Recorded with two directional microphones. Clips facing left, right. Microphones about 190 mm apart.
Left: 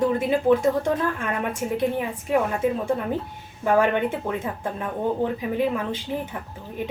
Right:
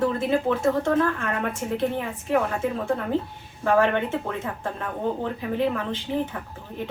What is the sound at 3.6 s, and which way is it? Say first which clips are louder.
Speech: left 1 dB; 10° left (ahead or behind).